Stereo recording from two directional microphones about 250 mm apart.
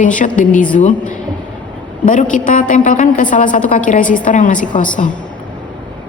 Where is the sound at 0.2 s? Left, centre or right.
Left.